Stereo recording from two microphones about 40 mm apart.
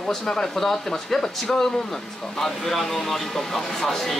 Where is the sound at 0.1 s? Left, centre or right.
Centre.